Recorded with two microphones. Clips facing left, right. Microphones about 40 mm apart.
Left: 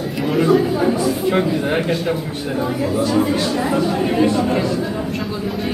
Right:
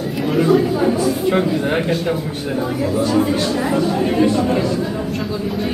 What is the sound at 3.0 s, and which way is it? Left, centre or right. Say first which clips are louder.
Speech: right 1 dB; centre.